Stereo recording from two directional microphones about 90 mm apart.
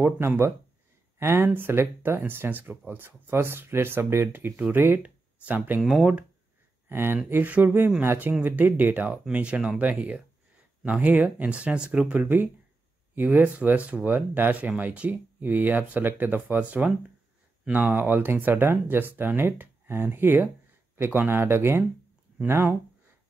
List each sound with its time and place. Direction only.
0.0 s speech: 25° right (ahead or behind)
5.8 s speech: 5° right (ahead or behind)
6.9 s speech: 25° right (ahead or behind)